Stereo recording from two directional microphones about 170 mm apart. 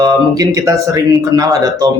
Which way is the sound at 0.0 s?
20° right (ahead or behind).